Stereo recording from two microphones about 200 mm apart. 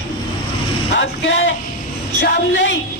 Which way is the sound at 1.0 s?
65° left (ahead or behind).